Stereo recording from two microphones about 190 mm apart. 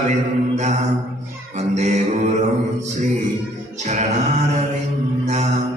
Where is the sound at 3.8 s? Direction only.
40° right (ahead or behind).